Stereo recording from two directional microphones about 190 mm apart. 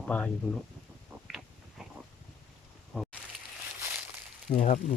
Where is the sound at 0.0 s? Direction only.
5° left (ahead or behind).